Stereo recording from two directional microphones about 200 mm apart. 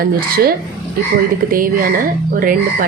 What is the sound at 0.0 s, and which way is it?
Speech, 50° right (ahead or behind).